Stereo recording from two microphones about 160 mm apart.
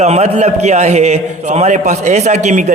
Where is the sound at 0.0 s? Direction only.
45° right (ahead or behind).